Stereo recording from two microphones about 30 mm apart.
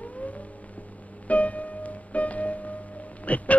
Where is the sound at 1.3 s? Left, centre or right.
Left.